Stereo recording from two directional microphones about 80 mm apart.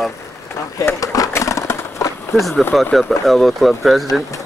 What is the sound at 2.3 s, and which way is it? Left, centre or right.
Speech, centre.